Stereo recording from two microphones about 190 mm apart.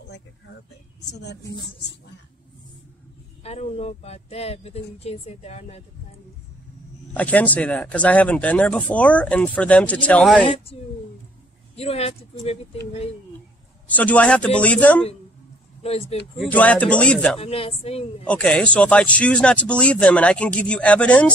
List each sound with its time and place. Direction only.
3.4 s speech: 35° left (ahead or behind)
7.2 s speech: 5° left (ahead or behind)
10.5 s speech: 30° left (ahead or behind)
13.8 s speech: 10° left (ahead or behind)
15.8 s speech: 35° left (ahead or behind)
16.3 s speech: 5° left (ahead or behind)
17.4 s speech: 30° left (ahead or behind)
18.2 s speech: 5° left (ahead or behind)